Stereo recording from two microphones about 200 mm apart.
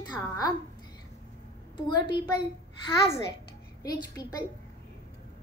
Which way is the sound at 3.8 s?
20° left (ahead or behind).